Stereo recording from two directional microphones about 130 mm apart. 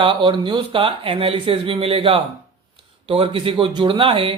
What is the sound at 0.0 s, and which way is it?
Speech, 40° right (ahead or behind).